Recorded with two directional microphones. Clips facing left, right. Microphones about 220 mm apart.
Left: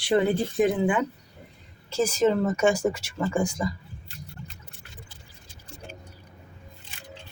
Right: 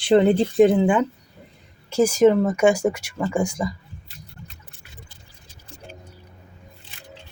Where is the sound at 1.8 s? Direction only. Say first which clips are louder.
Right 7 dB; 15° right (ahead or behind).